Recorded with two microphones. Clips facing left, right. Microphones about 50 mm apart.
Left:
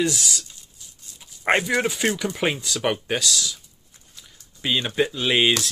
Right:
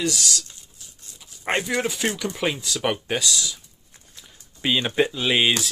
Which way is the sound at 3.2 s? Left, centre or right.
Centre.